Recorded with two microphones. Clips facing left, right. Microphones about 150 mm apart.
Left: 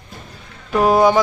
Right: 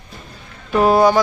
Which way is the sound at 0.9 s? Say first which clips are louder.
Even; 15° left (ahead or behind).